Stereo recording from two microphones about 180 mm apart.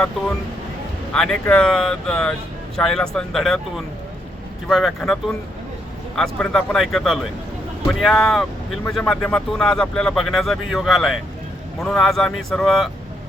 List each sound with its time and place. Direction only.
1.1 s speech: 5° left (ahead or behind)
6.1 s speech: 5° left (ahead or behind)